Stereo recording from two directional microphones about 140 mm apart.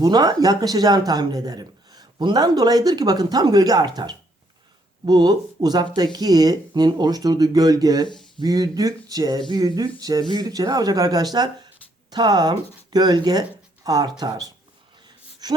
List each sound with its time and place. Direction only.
0.0 s speech: 30° right (ahead or behind)
8.0 s speech: 35° left (ahead or behind)
8.4 s speech: 25° right (ahead or behind)